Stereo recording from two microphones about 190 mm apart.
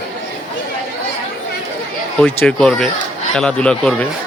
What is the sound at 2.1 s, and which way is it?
Speech, 5° left (ahead or behind).